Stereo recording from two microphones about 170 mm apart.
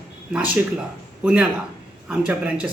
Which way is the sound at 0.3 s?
10° right (ahead or behind).